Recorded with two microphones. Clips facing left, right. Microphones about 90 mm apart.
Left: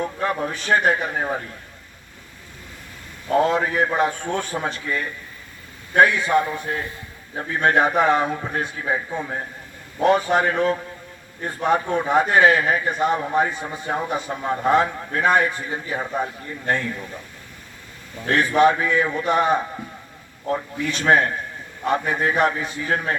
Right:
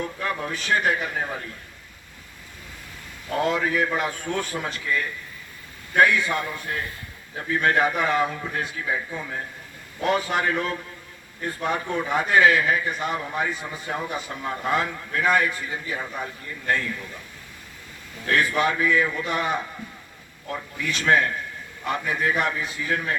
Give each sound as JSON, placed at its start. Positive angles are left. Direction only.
{"t": 0.2, "sound": "a man's voice", "side_deg": 30}
{"t": 3.4, "sound": "a man's voice", "side_deg": 35}
{"t": 18.3, "sound": "a man's voice", "side_deg": 30}